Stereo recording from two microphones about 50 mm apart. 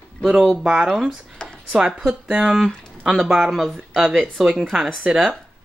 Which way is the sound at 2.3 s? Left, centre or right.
Centre.